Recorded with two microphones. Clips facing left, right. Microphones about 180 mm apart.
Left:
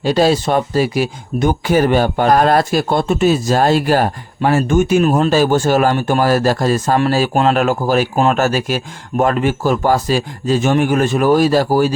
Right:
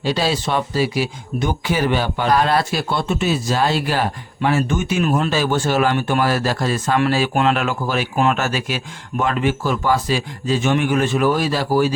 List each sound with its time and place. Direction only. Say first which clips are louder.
0.0 s speech: left 7 dB; 45° left (ahead or behind)